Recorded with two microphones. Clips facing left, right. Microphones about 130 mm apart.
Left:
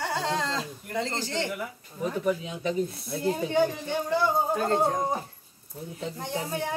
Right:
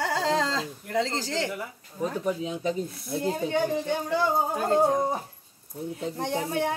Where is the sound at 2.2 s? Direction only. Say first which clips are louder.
Left 1 dB; 30° right (ahead or behind).